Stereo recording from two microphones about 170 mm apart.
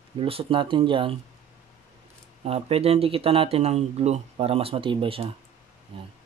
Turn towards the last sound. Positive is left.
turn(degrees=-30)  # may be behind; listen again after turning